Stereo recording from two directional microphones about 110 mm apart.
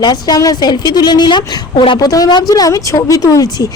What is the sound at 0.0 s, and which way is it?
Speech, 40° left (ahead or behind).